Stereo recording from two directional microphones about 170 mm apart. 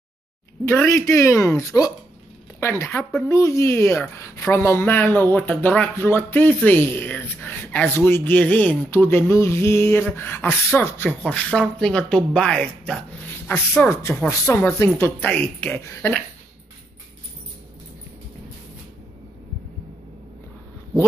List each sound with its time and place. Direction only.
0.7 s a woman's voice: 15° left (ahead or behind)